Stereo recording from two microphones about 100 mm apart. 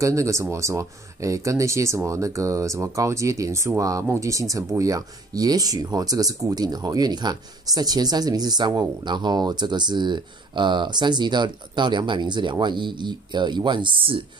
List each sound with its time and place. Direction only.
0.0 s speech: 30° right (ahead or behind); by 14.2 s 55° right (ahead or behind)